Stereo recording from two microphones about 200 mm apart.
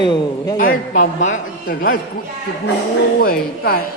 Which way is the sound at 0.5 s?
45° left (ahead or behind).